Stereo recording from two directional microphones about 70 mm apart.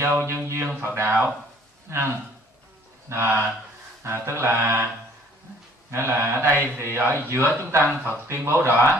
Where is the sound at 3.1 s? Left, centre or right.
Right.